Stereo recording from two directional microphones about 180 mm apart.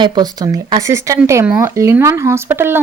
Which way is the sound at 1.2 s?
10° right (ahead or behind).